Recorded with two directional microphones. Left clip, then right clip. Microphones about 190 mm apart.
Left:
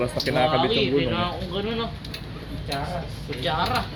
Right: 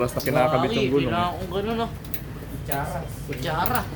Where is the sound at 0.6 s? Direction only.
50° right (ahead or behind).